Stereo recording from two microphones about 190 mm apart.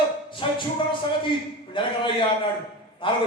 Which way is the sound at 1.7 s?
25° left (ahead or behind).